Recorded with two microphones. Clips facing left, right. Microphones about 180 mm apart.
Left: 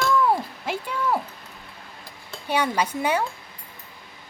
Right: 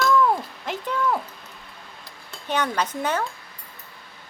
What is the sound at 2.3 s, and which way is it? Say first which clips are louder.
Dishes: left 1 dB; 10° left (ahead or behind).